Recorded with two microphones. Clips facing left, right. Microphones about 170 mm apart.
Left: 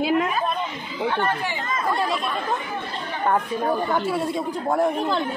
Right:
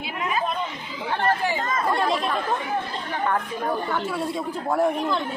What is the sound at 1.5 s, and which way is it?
Speech, 35° right (ahead or behind).